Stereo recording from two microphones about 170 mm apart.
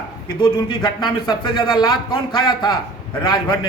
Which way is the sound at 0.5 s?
25° left (ahead or behind).